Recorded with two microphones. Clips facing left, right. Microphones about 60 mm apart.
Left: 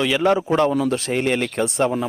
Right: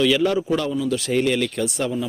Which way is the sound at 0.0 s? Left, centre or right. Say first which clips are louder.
Left 1 dB; left.